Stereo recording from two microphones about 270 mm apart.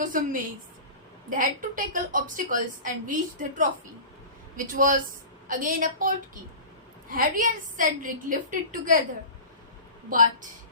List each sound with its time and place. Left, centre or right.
0.0 s a woman's voice: right
7.1 s a woman's voice: right